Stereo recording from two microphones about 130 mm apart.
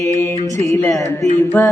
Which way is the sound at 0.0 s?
25° left (ahead or behind).